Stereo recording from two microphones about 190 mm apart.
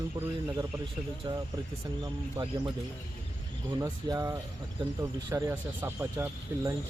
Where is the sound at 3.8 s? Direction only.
20° right (ahead or behind).